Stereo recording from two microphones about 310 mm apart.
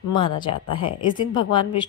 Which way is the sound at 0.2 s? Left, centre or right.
Centre.